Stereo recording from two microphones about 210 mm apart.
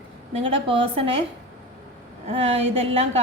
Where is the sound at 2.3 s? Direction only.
30° right (ahead or behind).